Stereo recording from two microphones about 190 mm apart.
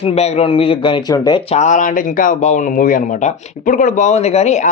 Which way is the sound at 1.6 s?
40° left (ahead or behind).